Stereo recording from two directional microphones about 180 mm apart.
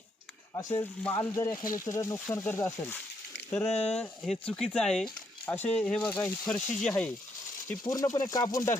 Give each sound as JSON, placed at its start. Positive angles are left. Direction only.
{"t": 0.5, "sound": "speech", "side_deg": 20}
{"t": 3.7, "sound": "speech", "side_deg": 35}
{"t": 3.9, "sound": "speech", "side_deg": 5}
{"t": 7.7, "sound": "speech", "side_deg": 20}